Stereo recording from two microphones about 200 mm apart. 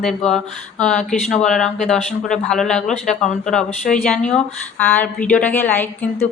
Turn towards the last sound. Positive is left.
turn(degrees=10)  # may be behind; listen again after turning